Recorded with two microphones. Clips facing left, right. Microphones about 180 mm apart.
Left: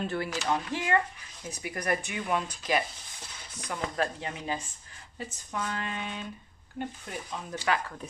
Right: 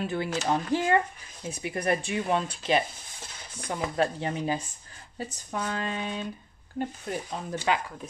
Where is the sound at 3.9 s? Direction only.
30° right (ahead or behind).